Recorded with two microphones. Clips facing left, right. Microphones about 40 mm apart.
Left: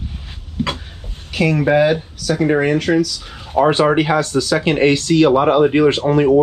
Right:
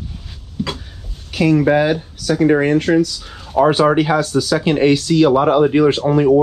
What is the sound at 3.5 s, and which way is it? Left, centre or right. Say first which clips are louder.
Speech: right 1 dB; left.